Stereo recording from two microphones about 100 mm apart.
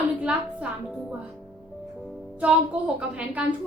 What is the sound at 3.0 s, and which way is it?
Speech, 10° right (ahead or behind).